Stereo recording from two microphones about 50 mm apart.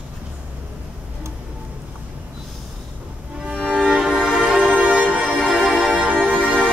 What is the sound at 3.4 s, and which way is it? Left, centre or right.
Music, centre.